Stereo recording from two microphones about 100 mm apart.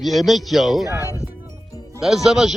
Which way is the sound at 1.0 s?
30° left (ahead or behind).